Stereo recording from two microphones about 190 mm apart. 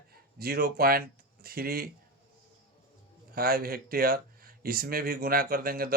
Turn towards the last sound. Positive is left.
turn(degrees=-50)  # may be behind; listen again after turning